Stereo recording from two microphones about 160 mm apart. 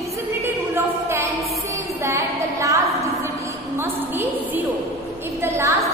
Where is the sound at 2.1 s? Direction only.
20° right (ahead or behind).